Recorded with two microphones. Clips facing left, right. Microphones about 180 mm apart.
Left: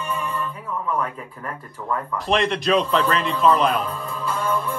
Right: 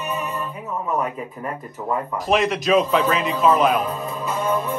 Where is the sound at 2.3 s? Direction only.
5° right (ahead or behind).